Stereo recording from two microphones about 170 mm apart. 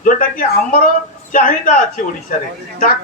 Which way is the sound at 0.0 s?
55° left (ahead or behind).